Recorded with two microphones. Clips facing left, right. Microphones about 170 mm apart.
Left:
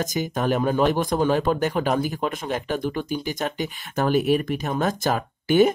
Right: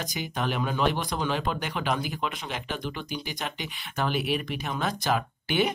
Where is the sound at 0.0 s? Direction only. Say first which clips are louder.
Left 7 dB; 45° left (ahead or behind).